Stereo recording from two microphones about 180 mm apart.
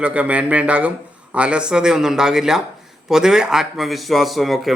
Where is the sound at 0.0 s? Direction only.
5° right (ahead or behind).